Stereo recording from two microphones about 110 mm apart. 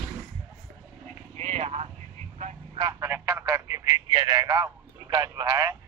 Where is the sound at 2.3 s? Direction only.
90° right.